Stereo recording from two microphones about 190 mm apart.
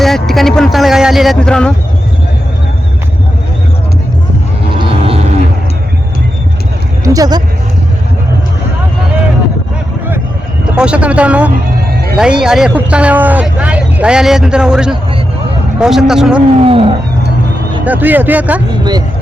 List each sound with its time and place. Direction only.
0.0 s vehicle: centre (ahead or behind)
4.9 s vehicle: 30° right (ahead or behind)
7.0 s a sound: 20° right (ahead or behind)
10.8 s speech: 5° right (ahead or behind)
16.6 s roaring cats: 30° right (ahead or behind)
17.8 s speech: 10° right (ahead or behind)
18.7 s roaring cats: 20° right (ahead or behind)